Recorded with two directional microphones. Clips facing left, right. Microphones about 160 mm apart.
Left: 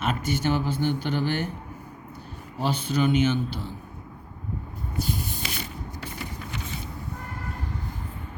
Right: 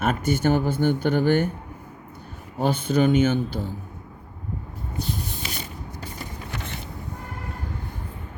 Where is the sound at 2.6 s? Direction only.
50° right (ahead or behind).